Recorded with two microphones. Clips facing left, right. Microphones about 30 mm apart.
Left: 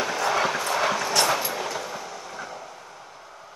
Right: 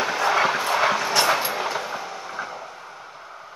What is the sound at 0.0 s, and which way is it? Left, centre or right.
Train, centre.